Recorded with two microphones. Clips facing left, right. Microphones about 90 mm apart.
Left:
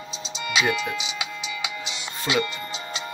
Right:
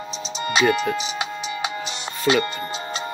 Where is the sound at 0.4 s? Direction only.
40° right (ahead or behind).